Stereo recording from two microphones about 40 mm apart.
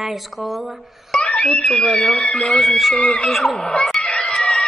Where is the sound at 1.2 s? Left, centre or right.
Left.